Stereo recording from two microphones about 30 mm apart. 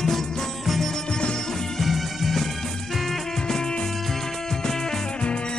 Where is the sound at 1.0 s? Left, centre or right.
Left.